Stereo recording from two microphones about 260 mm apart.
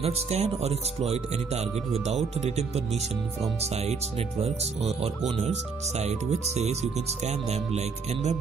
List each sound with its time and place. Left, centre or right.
0.0 s speech: right
4.4 s speech: right